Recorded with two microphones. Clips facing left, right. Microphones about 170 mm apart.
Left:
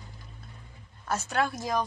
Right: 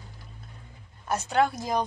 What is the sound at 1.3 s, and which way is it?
Speech, 25° right (ahead or behind).